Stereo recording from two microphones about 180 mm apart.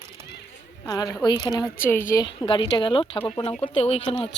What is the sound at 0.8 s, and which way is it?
A woman's voice, 20° left (ahead or behind).